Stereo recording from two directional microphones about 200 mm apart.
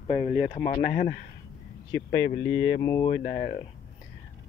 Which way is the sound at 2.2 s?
55° left (ahead or behind).